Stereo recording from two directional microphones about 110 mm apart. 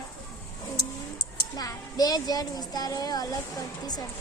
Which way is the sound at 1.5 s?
35° left (ahead or behind).